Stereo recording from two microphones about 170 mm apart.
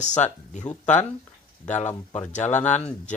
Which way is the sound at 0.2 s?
45° left (ahead or behind).